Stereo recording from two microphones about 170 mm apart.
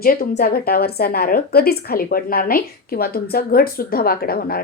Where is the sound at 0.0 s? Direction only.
60° left (ahead or behind).